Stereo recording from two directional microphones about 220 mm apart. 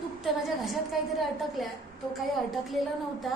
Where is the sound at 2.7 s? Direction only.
Centre (ahead or behind).